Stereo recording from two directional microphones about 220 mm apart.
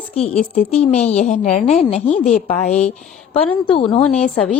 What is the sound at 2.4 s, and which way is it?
A woman's voice, 30° left (ahead or behind).